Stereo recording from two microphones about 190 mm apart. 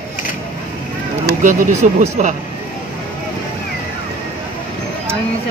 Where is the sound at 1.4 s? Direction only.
40° right (ahead or behind).